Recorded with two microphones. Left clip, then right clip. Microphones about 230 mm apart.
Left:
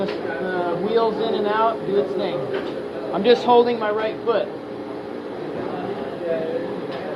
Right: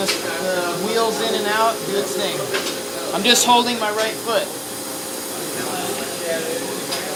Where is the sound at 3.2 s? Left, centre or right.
Right.